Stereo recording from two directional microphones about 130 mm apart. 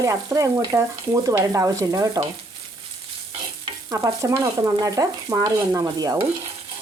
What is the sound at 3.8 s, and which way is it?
Stir, 25° right (ahead or behind).